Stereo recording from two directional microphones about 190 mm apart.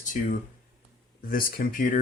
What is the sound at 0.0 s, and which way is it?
Speech, 40° left (ahead or behind).